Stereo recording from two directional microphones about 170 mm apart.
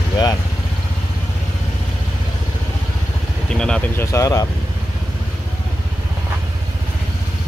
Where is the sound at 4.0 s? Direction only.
20° left (ahead or behind).